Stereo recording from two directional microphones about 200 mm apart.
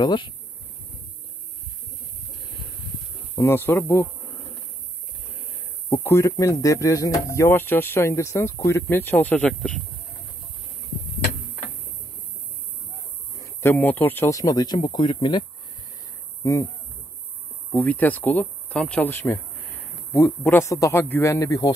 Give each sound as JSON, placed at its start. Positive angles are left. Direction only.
{"t": 0.0, "sound": "speech", "side_deg": 25}
{"t": 3.3, "sound": "insect", "side_deg": 10}
{"t": 5.9, "sound": "speech", "side_deg": 15}
{"t": 13.4, "sound": "speech", "side_deg": 10}
{"t": 17.6, "sound": "speech", "side_deg": 10}